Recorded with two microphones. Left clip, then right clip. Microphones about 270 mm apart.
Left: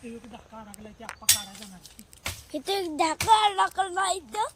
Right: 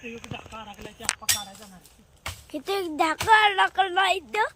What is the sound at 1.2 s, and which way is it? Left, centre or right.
Speech, centre.